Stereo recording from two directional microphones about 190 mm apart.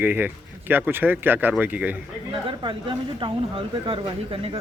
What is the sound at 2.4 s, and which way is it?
Speech, 25° right (ahead or behind).